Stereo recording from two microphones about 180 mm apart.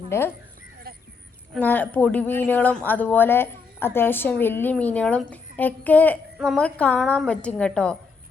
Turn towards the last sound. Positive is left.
turn(degrees=5)  # may be behind; listen again after turning